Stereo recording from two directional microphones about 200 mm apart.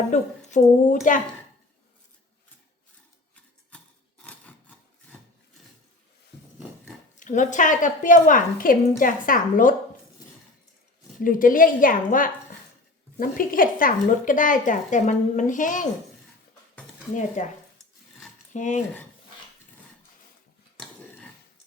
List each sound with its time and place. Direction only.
0.1 s speech: 35° left (ahead or behind)
4.2 s rub: 5° left (ahead or behind)
7.2 s a woman's voice: 40° left (ahead or behind)
11.2 s a woman's voice: 45° left (ahead or behind)
17.2 s speech: 35° left (ahead or behind)
18.5 s speech: 40° left (ahead or behind)